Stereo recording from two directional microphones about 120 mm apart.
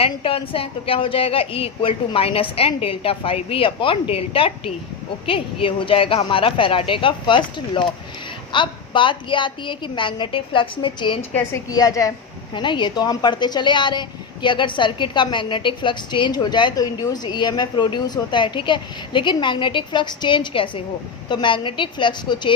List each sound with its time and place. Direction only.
0.0 s a woman's voice: 50° left (ahead or behind)
11.7 s a woman's voice: 30° left (ahead or behind)
12.5 s a woman's voice: 40° left (ahead or behind)